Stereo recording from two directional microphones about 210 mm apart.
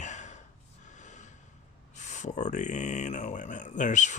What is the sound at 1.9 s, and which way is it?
Speech, 35° left (ahead or behind).